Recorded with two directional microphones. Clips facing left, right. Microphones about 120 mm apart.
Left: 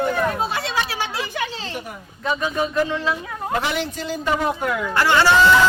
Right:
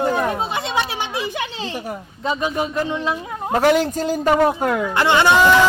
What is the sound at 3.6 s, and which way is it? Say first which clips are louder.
Speech: right 9 dB; 40° right (ahead or behind).